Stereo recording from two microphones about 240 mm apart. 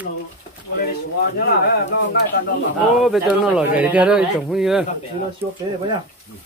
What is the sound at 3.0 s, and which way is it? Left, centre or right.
Speech, centre.